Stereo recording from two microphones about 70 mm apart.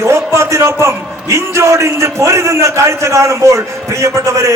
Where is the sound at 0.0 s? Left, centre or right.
Right.